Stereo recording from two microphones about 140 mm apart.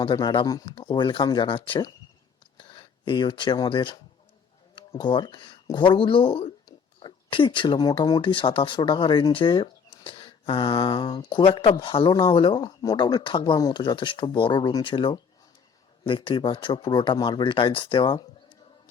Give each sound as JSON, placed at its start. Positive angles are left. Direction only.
{"t": 0.0, "sound": "speech", "side_deg": 30}